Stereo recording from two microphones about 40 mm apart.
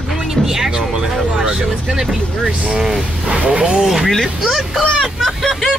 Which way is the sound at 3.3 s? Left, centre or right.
Right.